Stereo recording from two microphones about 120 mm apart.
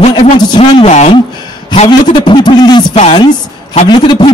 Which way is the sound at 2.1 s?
40° left (ahead or behind).